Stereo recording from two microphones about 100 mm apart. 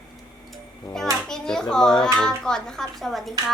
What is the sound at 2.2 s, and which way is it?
A child's voice, 5° left (ahead or behind).